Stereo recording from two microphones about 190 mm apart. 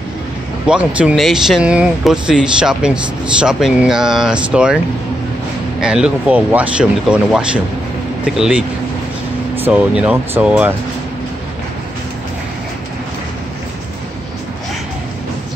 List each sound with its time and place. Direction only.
0.7 s speech: 5° right (ahead or behind)
5.8 s speech: 5° right (ahead or behind)